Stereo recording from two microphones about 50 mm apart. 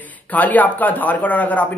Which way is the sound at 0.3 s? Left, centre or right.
Left.